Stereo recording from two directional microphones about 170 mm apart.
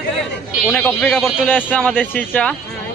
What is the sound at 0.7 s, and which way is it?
Speech, 10° left (ahead or behind).